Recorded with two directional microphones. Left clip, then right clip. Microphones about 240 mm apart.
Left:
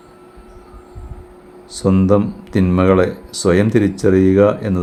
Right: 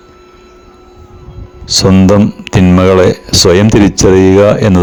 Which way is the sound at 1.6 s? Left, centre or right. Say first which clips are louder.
Right 9 dB; right.